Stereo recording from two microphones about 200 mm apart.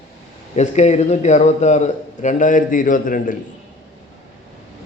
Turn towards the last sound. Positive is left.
turn(degrees=40)  # may be behind; listen again after turning